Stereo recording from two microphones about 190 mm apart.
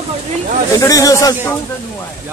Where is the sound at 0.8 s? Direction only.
15° left (ahead or behind).